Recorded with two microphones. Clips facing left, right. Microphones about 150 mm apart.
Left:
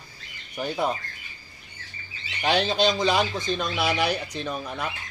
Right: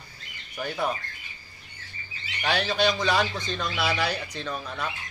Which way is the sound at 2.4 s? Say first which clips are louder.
Left 2 dB; 20° left (ahead or behind).